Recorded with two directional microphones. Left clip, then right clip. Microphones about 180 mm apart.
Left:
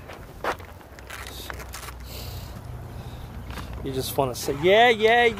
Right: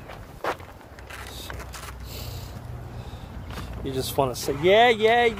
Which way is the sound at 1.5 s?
25° left (ahead or behind).